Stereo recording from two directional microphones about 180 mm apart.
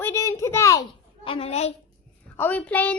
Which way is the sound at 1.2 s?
35° left (ahead or behind).